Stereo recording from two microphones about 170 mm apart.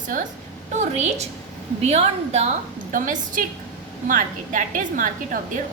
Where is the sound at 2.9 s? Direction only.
50° right (ahead or behind).